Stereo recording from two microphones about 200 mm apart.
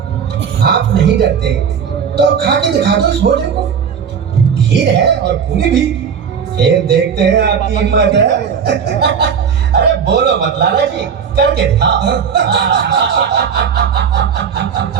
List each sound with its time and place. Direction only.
0.6 s speech: 55° right (ahead or behind)
4.7 s speech: 60° right (ahead or behind)
6.6 s speech: 60° right (ahead or behind)